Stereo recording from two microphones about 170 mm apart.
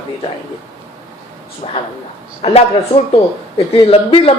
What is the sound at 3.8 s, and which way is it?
Speech, 35° left (ahead or behind).